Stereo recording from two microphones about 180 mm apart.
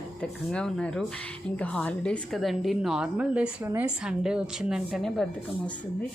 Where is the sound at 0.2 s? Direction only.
5° left (ahead or behind).